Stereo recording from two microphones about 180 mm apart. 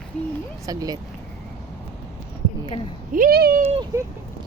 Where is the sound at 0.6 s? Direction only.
20° right (ahead or behind).